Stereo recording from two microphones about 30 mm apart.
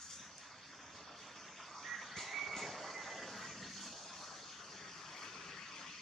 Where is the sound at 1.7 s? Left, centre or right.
Centre.